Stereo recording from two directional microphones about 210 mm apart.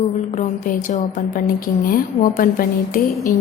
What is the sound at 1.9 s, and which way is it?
A woman's voice, 45° left (ahead or behind).